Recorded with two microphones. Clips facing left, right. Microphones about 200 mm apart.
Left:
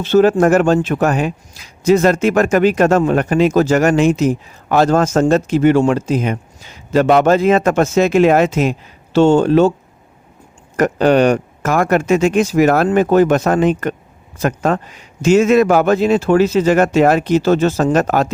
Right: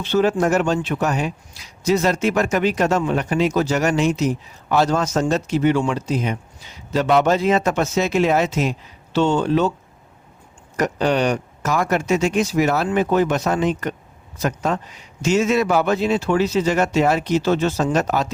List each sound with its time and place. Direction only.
0.0 s speech: 45° left (ahead or behind)
10.8 s speech: 55° left (ahead or behind)